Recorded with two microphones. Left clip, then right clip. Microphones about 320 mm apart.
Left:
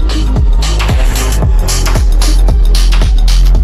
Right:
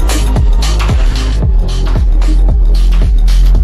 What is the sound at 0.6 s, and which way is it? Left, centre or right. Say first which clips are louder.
Music: left 3 dB; centre.